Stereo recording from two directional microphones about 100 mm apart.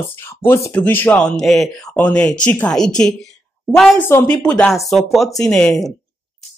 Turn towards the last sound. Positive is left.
turn(degrees=5)  # may be behind; listen again after turning